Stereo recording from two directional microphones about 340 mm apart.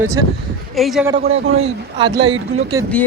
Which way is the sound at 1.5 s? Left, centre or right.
Centre.